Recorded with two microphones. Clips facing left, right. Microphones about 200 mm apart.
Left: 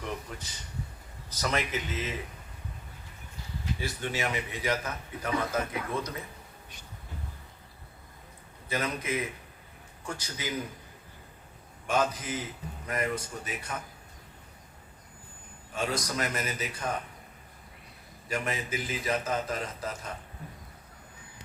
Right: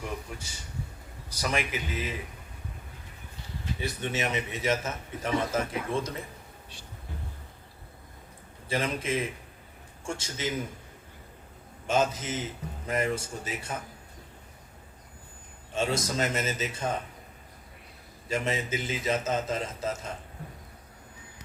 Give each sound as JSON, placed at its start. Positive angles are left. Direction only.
{"t": 1.3, "sound": "speech", "side_deg": -10}
{"t": 3.8, "sound": "a man's voice", "side_deg": -20}
{"t": 8.7, "sound": "a man's voice", "side_deg": -30}
{"t": 11.9, "sound": "a man's voice", "side_deg": -25}
{"t": 15.7, "sound": "a man's voice", "side_deg": -25}
{"t": 18.3, "sound": "a man's voice", "side_deg": -25}